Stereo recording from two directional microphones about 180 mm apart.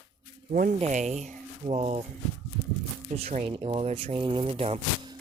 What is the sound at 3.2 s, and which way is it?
Speech, 35° right (ahead or behind).